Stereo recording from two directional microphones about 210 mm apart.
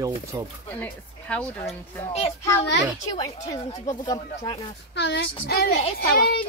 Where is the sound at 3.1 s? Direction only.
15° left (ahead or behind).